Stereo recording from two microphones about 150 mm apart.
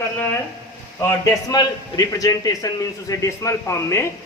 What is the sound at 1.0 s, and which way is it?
A man's voice, 20° left (ahead or behind).